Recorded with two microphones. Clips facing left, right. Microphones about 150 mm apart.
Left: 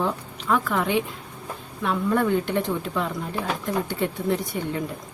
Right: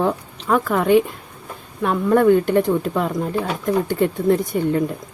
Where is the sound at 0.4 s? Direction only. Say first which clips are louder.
Right 6 dB; 45° right (ahead or behind).